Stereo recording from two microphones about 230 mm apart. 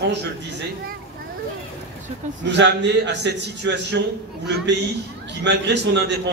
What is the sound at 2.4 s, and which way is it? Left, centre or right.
A man's voice, right.